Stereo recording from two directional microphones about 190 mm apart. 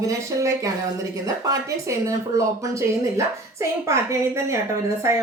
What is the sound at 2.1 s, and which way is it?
Speech, 15° right (ahead or behind).